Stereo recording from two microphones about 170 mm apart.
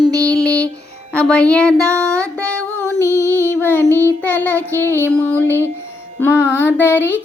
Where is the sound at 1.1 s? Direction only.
5° left (ahead or behind).